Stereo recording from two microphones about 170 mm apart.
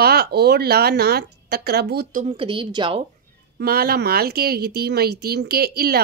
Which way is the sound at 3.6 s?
65° right (ahead or behind).